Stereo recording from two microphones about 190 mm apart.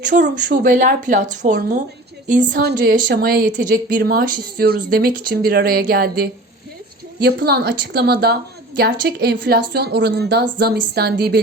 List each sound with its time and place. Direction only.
0.0 s a woman's voice: 45° right (ahead or behind)